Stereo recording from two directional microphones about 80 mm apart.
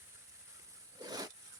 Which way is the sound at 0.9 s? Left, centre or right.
Right.